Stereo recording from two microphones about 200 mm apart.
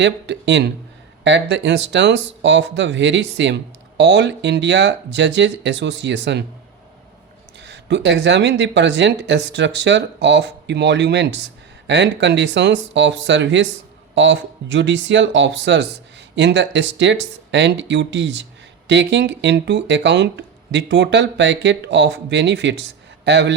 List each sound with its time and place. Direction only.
0.0 s speech: 60° right (ahead or behind)
7.6 s speech: 60° right (ahead or behind)